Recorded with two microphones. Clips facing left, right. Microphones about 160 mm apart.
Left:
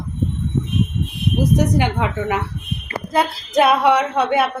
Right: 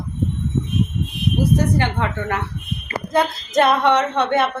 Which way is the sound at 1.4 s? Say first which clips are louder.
Left 2 dB; 15° left (ahead or behind).